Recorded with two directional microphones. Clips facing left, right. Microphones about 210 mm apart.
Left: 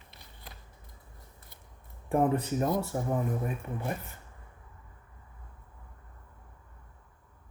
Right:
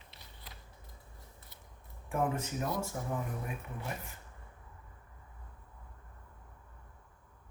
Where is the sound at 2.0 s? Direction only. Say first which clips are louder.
Left 7 dB; 35° left (ahead or behind).